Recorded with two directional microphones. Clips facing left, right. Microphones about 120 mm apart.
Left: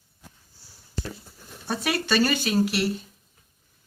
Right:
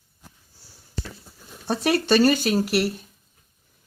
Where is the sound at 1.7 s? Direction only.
40° right (ahead or behind).